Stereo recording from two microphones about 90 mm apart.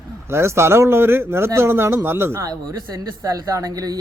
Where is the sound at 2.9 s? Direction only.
40° right (ahead or behind).